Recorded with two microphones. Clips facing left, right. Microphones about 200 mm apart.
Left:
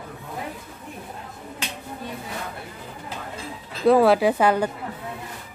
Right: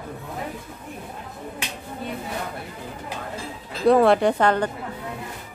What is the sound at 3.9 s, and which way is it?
Speech, centre (ahead or behind).